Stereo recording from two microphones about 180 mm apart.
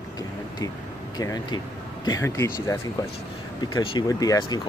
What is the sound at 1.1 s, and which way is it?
Speech, 20° left (ahead or behind).